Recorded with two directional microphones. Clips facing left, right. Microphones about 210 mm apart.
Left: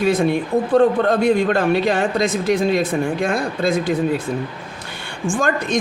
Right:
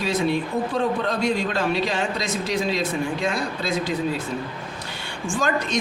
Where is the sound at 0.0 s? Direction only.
55° left (ahead or behind).